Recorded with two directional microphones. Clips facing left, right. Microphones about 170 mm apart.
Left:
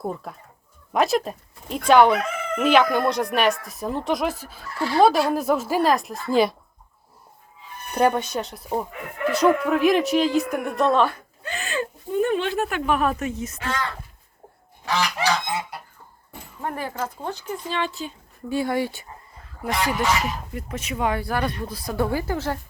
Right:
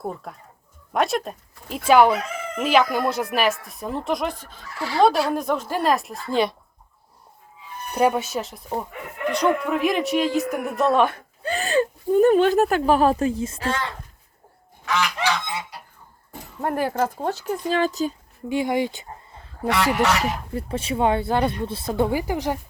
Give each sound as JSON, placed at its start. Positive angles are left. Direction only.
{"t": 0.0, "sound": "speech", "side_deg": 0}
{"t": 7.9, "sound": "speech", "side_deg": -5}
{"t": 11.4, "sound": "speech", "side_deg": -35}
{"t": 14.8, "sound": "goose", "side_deg": 35}
{"t": 16.6, "sound": "speech", "side_deg": -40}
{"t": 18.4, "sound": "speech", "side_deg": -15}
{"t": 19.6, "sound": "speech", "side_deg": -70}
{"t": 20.5, "sound": "speech", "side_deg": -30}